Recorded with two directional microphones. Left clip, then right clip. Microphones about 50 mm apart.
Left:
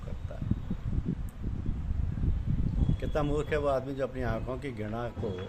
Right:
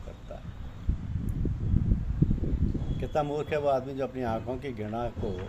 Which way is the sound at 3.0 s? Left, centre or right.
Left.